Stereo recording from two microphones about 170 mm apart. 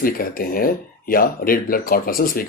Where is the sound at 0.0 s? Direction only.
60° left (ahead or behind).